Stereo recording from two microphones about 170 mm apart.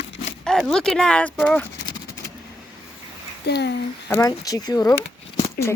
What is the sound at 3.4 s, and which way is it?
Speech, 75° left (ahead or behind).